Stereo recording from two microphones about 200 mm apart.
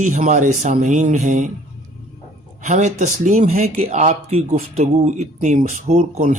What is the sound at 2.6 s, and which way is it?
Speech, 35° right (ahead or behind).